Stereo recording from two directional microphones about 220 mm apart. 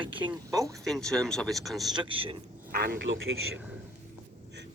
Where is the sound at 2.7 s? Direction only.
45° right (ahead or behind); by 3.6 s 65° right (ahead or behind).